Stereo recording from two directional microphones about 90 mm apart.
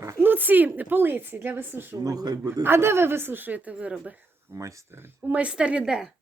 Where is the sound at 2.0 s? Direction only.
45° right (ahead or behind).